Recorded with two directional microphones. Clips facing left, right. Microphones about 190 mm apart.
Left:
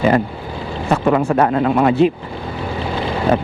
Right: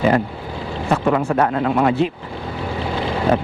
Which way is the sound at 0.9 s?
20° left (ahead or behind).